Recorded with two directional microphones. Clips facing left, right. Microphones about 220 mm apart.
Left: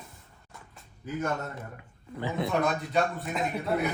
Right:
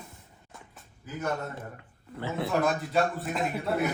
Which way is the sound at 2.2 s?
15° left (ahead or behind).